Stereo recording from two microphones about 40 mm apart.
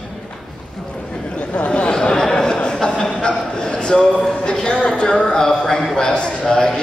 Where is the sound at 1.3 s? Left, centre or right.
Left.